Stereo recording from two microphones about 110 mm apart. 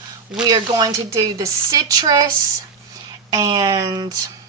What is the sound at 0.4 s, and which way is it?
A woman's voice, 35° right (ahead or behind).